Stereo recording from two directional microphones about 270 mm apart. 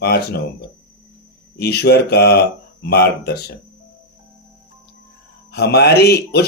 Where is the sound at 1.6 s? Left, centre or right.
Left.